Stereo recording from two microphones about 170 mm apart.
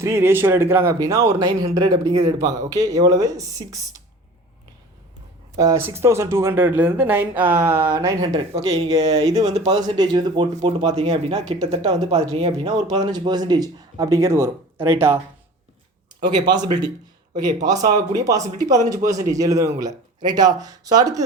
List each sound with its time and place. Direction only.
0.0 s speech: 15° right (ahead or behind)
5.5 s speech: 15° right (ahead or behind)
9.5 s speech: 35° right (ahead or behind)
9.7 s speech: 25° right (ahead or behind)
10.5 s speech: 40° right (ahead or behind)
11.8 s speech: 25° right (ahead or behind)
12.1 s speech: 40° right (ahead or behind)
13.0 s speech: 25° right (ahead or behind)
16.2 s speech: 25° right (ahead or behind)